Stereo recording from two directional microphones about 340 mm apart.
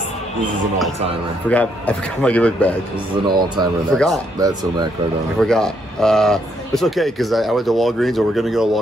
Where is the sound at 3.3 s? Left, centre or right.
Centre.